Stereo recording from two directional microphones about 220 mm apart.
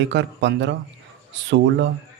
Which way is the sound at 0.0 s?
55° right (ahead or behind).